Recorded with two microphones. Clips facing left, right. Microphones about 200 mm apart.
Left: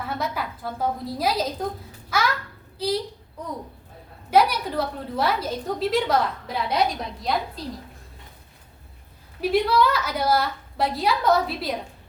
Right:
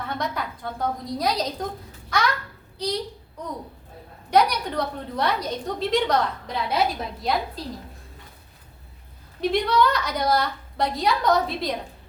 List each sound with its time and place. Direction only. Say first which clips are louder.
0.0 s a woman's voice: even; 5° left (ahead or behind)
2.0 s a sound: even; 5° left (ahead or behind)
4.3 s a woman's voice: left 1 dB; 5° left (ahead or behind)
9.4 s a woman's voice: left 1 dB; 5° left (ahead or behind)